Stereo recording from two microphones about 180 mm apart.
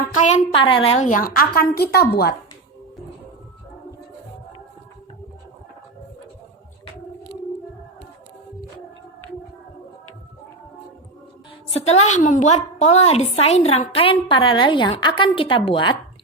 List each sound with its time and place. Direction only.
0.2 s a woman's voice: 40° left (ahead or behind); by 2.0 s 60° left (ahead or behind)
11.7 s a woman's voice: 35° left (ahead or behind)